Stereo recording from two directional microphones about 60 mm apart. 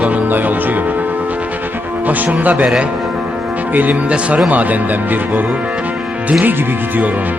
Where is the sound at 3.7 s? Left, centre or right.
Right.